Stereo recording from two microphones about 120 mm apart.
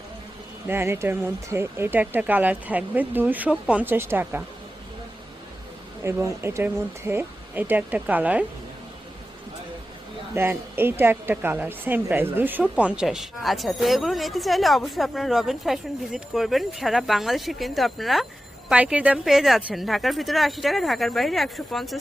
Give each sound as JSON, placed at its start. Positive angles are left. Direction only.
{"t": 0.7, "sound": "speech", "side_deg": -20}
{"t": 6.1, "sound": "speech", "side_deg": -20}
{"t": 10.3, "sound": "a woman's voice", "side_deg": -20}